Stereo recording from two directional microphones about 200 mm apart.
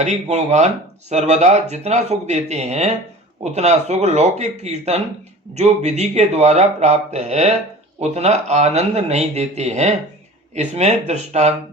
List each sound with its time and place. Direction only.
0.0 s speech: 35° right (ahead or behind)